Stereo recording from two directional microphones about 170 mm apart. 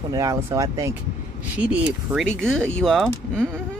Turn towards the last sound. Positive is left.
turn(degrees=0)  # may be behind; listen again after turning